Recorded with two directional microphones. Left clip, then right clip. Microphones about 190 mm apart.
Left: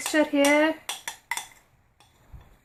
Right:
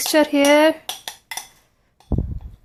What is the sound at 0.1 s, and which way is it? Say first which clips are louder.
Speech: right 6 dB; 50° right (ahead or behind).